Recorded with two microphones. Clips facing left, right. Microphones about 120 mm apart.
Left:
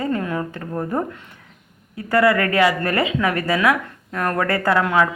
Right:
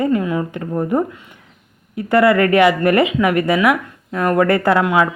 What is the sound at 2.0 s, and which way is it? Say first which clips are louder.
A woman's voice: right 4 dB; 25° right (ahead or behind).